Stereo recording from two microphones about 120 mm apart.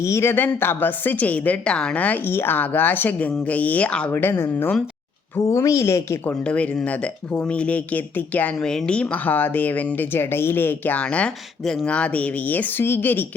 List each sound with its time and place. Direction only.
0.0 s speech: 20° left (ahead or behind)
7.3 s speech: 10° left (ahead or behind)